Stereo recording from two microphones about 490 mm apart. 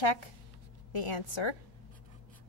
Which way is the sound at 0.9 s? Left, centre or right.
Left.